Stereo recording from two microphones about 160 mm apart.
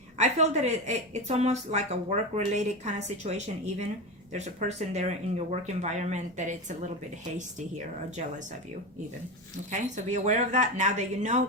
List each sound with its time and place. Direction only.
0.2 s speech: 45° right (ahead or behind)
9.6 s speech: 50° right (ahead or behind)